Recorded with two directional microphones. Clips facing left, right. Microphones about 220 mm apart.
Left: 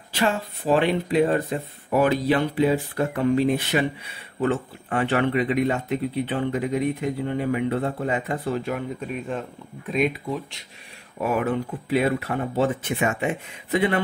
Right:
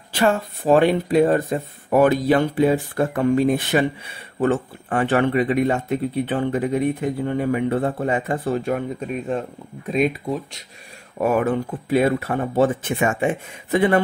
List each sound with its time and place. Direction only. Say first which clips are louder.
0.1 s speech: right 4 dB; 45° right (ahead or behind)
11.1 s speech: right 4 dB; 45° right (ahead or behind)